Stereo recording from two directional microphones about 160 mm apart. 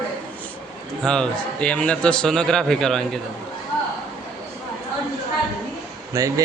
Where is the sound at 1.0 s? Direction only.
5° left (ahead or behind).